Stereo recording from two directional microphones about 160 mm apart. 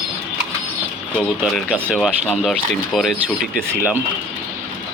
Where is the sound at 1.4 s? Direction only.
Centre (ahead or behind).